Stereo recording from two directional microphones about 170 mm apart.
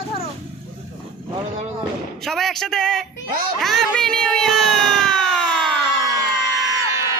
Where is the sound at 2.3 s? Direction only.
Centre (ahead or behind).